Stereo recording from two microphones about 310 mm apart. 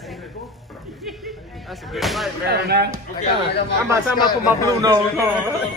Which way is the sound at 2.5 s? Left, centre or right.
Right.